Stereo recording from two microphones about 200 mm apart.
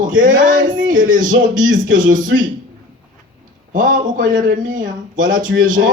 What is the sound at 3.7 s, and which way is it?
Speech, 40° right (ahead or behind).